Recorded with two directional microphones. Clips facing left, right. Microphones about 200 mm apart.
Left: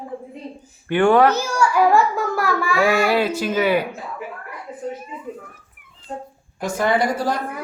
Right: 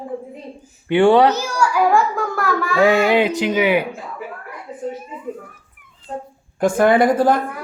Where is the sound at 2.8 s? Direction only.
20° right (ahead or behind).